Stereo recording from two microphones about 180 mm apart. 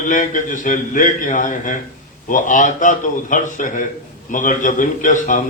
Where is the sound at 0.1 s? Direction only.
45° left (ahead or behind).